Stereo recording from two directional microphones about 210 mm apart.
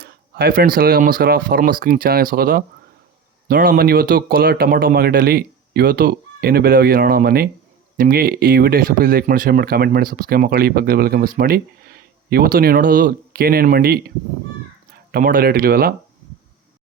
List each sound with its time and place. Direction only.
0.0 s speech: 45° right (ahead or behind)
15.1 s speech: 45° right (ahead or behind)